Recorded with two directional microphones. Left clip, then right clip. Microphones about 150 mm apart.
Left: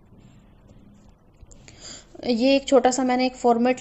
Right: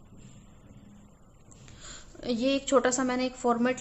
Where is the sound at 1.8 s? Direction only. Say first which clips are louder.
Left 7 dB; 35° left (ahead or behind).